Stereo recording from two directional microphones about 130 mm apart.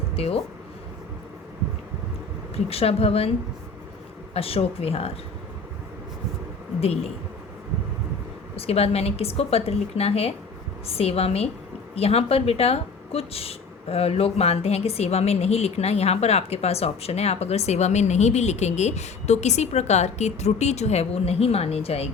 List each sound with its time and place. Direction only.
0.1 s speech: 50° left (ahead or behind)
2.6 s speech: 50° left (ahead or behind)
4.4 s speech: 50° left (ahead or behind)
6.7 s speech: 50° left (ahead or behind)
8.5 s speech: 50° left (ahead or behind)